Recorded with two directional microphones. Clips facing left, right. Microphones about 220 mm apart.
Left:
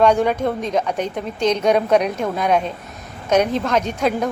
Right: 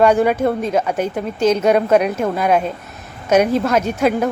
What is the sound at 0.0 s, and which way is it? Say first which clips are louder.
A woman's voice: right 2 dB; 5° right (ahead or behind).